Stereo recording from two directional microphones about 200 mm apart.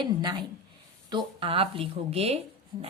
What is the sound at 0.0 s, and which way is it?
A woman's voice, 20° right (ahead or behind).